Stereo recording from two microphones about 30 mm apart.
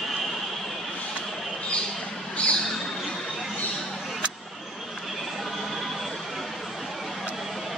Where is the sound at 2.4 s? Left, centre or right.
Left.